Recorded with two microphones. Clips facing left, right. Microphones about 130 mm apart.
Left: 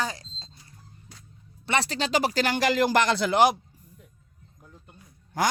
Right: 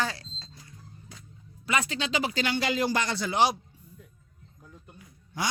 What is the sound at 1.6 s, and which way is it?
Speech, 35° left (ahead or behind).